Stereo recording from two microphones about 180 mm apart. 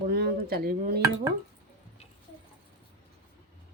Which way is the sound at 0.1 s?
60° right (ahead or behind).